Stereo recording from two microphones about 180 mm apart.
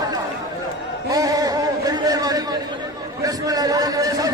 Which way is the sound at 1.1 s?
20° right (ahead or behind).